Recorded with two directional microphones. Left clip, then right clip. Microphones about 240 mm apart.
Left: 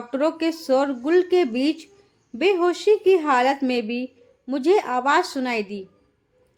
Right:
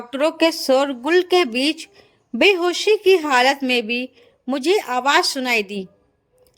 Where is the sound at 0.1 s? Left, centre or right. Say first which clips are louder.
Right 5 dB; right.